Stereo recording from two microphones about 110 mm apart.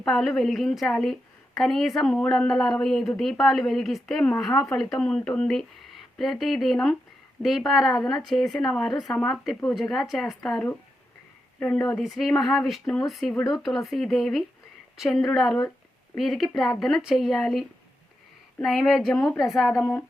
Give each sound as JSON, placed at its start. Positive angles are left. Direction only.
{"t": 0.0, "sound": "a woman's voice", "side_deg": 0}
{"t": 11.6, "sound": "a woman's voice", "side_deg": 10}
{"t": 19.8, "sound": "a sound", "side_deg": 15}